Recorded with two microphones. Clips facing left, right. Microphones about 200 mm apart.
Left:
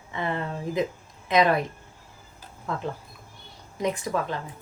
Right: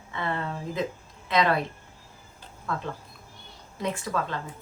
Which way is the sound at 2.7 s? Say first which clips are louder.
Left 2 dB; 20° left (ahead or behind).